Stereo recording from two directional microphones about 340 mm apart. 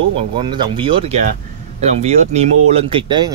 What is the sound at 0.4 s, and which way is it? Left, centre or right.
Speech, centre.